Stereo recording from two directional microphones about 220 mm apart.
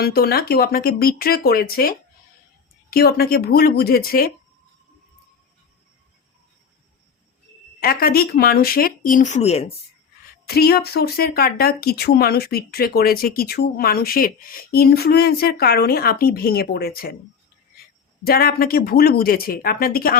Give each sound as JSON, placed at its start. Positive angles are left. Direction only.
{"t": 0.0, "sound": "speech", "side_deg": 45}
{"t": 7.8, "sound": "speech", "side_deg": 40}
{"t": 10.5, "sound": "speech", "side_deg": 45}
{"t": 18.2, "sound": "speech", "side_deg": 45}